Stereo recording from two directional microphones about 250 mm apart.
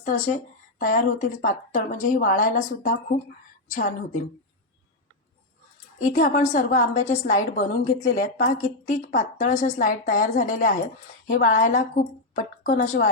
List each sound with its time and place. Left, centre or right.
0.0 s a woman's voice: left
6.0 s a woman's voice: left